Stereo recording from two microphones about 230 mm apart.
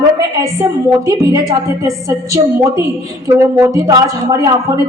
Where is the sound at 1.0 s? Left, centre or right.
Centre.